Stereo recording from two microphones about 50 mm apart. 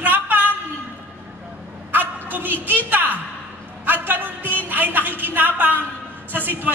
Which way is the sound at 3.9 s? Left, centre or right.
Right.